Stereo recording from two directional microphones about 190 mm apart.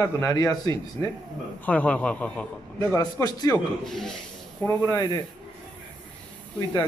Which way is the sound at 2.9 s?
20° left (ahead or behind).